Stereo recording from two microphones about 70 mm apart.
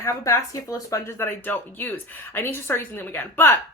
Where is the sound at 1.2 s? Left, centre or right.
Left.